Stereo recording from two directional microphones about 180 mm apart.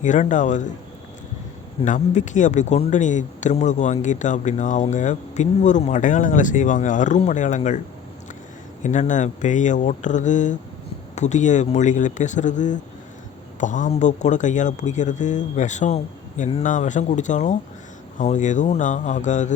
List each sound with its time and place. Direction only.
0.0 s speech: 45° left (ahead or behind)
1.8 s speech: 40° left (ahead or behind)
8.8 s speech: 45° left (ahead or behind)